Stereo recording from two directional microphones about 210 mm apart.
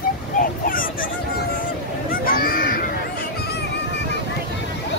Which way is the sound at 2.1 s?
45° left (ahead or behind).